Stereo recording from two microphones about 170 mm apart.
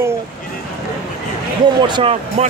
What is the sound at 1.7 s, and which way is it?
Speech, 25° right (ahead or behind).